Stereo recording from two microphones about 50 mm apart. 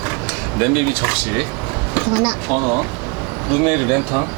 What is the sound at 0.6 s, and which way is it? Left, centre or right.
Speech, centre.